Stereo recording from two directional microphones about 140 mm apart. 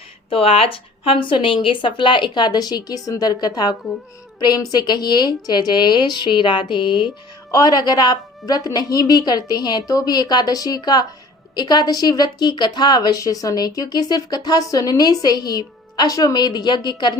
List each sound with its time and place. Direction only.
0.3 s a woman's voice: 40° left (ahead or behind)